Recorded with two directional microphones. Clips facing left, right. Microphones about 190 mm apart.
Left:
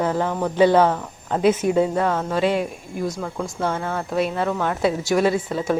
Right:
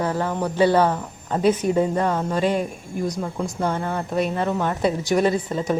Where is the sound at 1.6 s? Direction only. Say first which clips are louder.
Left 1 dB; 10° left (ahead or behind).